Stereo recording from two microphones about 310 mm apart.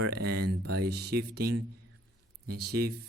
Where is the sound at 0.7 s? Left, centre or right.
Right.